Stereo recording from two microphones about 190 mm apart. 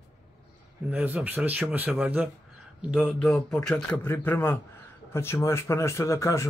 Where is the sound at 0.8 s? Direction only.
10° right (ahead or behind).